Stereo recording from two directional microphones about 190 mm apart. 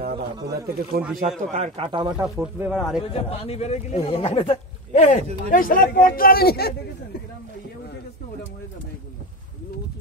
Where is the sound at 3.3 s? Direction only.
30° left (ahead or behind); by 6.7 s 55° left (ahead or behind).